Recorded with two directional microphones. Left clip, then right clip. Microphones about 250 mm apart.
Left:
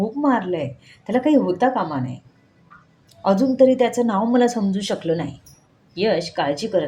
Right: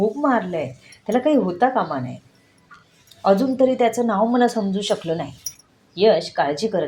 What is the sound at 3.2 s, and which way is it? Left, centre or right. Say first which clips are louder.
A woman's voice: left 1 dB; centre.